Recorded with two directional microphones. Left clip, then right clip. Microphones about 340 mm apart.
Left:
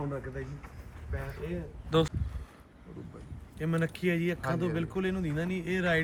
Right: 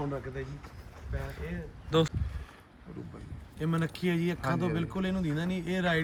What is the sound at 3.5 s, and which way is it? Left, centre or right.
Speech, centre.